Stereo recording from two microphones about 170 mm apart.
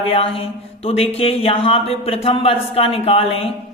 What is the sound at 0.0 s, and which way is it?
Speech, 35° left (ahead or behind).